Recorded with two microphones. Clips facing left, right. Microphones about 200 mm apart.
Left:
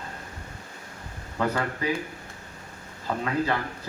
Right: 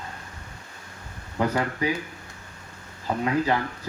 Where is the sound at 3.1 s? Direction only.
20° right (ahead or behind).